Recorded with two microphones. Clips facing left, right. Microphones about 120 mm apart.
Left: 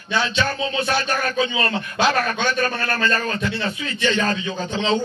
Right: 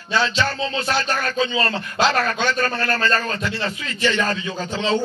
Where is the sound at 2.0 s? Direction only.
20° left (ahead or behind).